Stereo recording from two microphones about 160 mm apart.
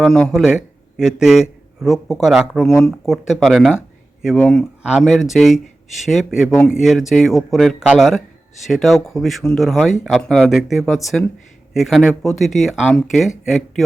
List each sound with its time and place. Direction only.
0.0 s a man's voice: 5° left (ahead or behind)
4.8 s speech: 5° right (ahead or behind)